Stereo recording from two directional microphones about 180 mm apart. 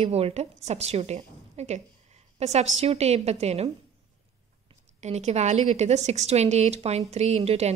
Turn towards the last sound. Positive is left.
turn(degrees=-35)  # may be behind; listen again after turning